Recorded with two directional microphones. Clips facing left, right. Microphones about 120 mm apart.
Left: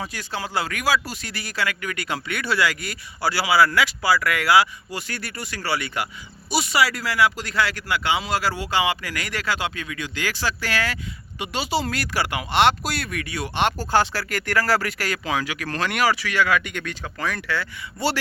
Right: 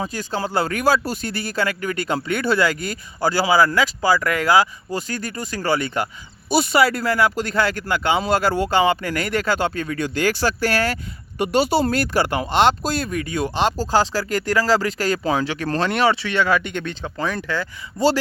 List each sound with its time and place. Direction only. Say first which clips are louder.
0.1 s speech: right 4 dB; 40° right (ahead or behind)
14.5 s speech: right 3 dB; 20° right (ahead or behind)
15.1 s speech: right 4 dB; 35° right (ahead or behind)